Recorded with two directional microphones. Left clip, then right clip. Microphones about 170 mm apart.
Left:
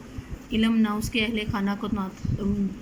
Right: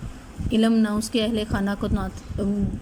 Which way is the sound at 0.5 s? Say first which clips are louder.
Right 3 dB; 45° right (ahead or behind).